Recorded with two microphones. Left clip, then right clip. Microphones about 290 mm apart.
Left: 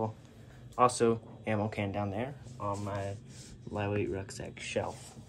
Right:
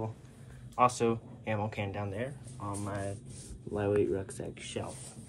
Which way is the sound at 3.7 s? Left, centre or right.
Left.